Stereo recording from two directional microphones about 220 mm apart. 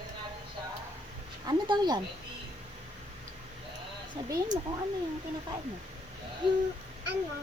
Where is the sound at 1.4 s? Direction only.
20° right (ahead or behind).